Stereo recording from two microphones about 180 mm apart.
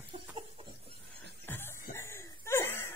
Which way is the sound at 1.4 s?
10° left (ahead or behind).